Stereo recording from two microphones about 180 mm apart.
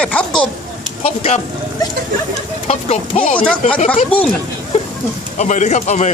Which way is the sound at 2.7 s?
35° left (ahead or behind).